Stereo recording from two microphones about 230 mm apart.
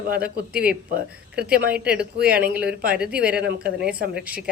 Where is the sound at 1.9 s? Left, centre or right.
Right.